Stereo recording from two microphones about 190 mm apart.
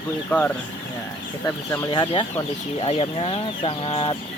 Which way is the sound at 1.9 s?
25° left (ahead or behind).